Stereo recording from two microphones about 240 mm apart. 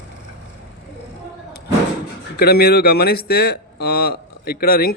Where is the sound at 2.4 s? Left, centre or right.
Left.